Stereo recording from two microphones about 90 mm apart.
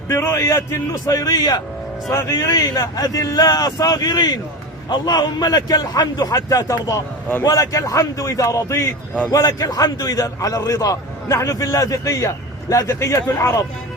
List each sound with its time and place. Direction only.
0.1 s a man's voice: 35° left (ahead or behind)